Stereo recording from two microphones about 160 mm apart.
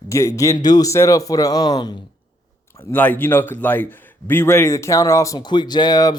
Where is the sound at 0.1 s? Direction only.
20° left (ahead or behind).